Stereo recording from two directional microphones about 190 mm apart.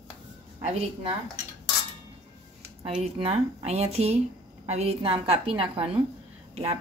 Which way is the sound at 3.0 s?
30° right (ahead or behind).